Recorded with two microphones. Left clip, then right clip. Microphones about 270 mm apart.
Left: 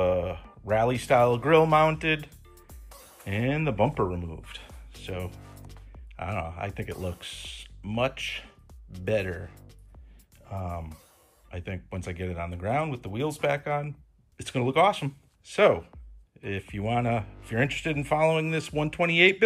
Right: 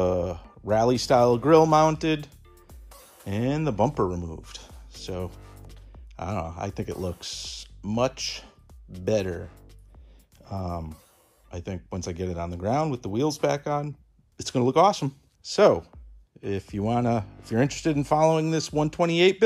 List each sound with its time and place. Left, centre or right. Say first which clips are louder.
0.0 s music: even; right
1.0 s speech: right 1 dB; right
2.5 s music: even; centre
3.3 s speech: right 1 dB; centre
5.3 s music: even; centre
6.1 s speech: right 1 dB; centre
9.4 s music: right 3 dB; centre
10.5 s speech: right 3 dB; right